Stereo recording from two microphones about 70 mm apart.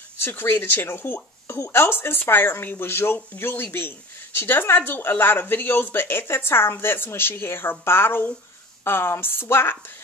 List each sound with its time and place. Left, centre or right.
0.2 s speech: left